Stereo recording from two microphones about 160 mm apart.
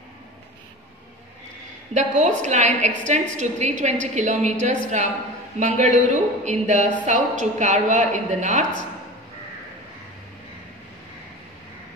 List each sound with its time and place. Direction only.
2.0 s a woman's voice: 50° right (ahead or behind)